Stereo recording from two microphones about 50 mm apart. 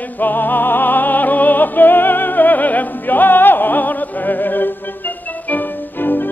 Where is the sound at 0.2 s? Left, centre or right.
Left.